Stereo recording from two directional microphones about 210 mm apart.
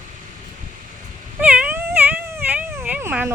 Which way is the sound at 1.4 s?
5° right (ahead or behind).